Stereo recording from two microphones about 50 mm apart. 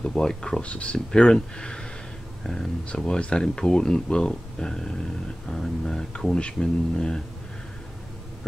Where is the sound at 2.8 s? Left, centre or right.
Centre.